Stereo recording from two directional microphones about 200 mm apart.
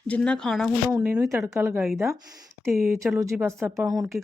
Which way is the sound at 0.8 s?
10° right (ahead or behind).